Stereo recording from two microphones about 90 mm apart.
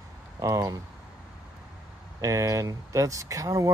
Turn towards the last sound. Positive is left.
turn(degrees=-40)  # may be behind; listen again after turning